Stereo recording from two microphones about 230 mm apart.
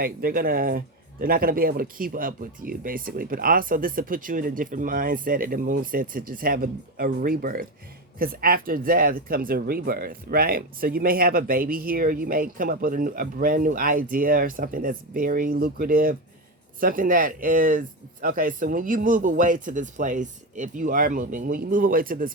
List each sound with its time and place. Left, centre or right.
0.0 s speech: right